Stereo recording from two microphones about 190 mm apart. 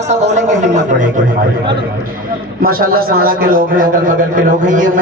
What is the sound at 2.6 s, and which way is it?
A man's voice, 50° right (ahead or behind).